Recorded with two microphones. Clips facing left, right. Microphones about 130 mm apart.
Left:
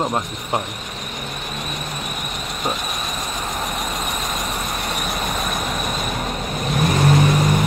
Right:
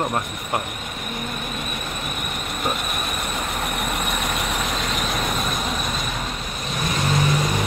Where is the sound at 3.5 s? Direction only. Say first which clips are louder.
Even; 65° right (ahead or behind).